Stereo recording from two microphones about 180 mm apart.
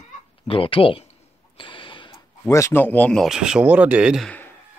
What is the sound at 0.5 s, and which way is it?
Speech, 30° left (ahead or behind).